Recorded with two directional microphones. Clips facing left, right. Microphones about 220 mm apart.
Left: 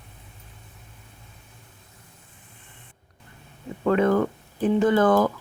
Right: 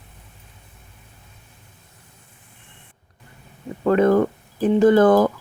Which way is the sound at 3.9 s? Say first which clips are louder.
Right 4 dB; 40° right (ahead or behind).